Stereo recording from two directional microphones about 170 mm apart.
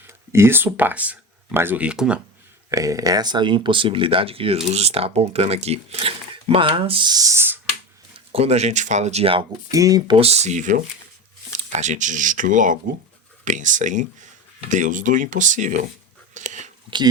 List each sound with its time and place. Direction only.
0.1 s speech: 15° right (ahead or behind)
2.6 s speech: 20° right (ahead or behind)
8.1 s speech: 35° right (ahead or behind)
9.7 s speech: 20° right (ahead or behind)
10.2 s speech: 40° right (ahead or behind)
16.3 s biting: 45° right (ahead or behind)